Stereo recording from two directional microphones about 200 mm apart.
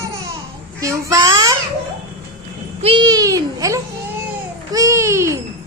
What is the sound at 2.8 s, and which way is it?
A child's voice, 25° right (ahead or behind).